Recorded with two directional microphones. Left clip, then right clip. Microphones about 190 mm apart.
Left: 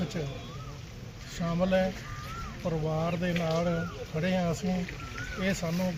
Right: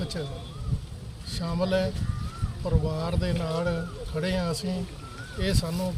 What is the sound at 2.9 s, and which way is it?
Speech, 5° right (ahead or behind).